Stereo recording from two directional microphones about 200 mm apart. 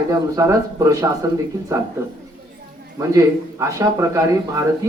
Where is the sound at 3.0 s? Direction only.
15° right (ahead or behind).